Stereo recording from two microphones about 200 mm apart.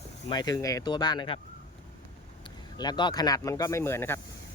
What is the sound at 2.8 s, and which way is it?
Speech, 20° left (ahead or behind).